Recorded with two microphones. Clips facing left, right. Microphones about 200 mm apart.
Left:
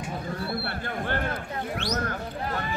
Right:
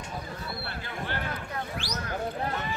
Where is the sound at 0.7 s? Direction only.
55° left (ahead or behind).